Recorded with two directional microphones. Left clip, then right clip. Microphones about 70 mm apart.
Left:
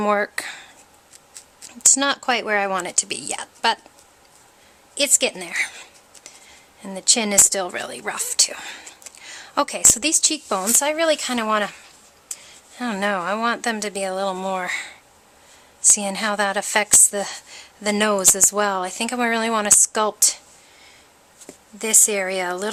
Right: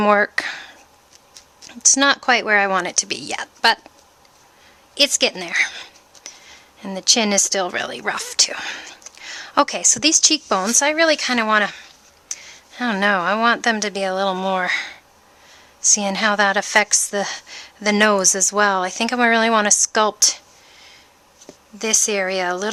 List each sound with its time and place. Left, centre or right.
0.0 s speech: right
1.9 s a woman's voice: right
4.9 s speech: right
16.0 s a woman's voice: right
21.8 s a woman's voice: right